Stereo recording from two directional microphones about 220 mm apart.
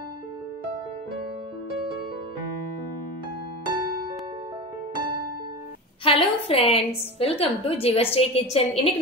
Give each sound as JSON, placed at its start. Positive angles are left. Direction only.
{"t": 6.0, "sound": "a woman's voice", "side_deg": 25}